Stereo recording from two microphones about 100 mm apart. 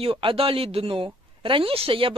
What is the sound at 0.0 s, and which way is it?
Speech, 65° right (ahead or behind).